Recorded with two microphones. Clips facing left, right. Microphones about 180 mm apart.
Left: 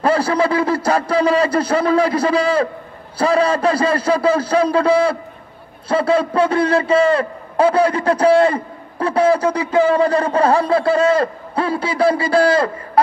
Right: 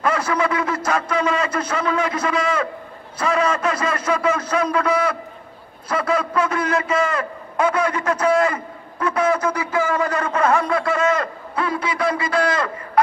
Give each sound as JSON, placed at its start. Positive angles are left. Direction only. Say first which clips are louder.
{"t": 0.0, "sound": "a man's voice", "louder": "left 5 dB", "side_deg": 30}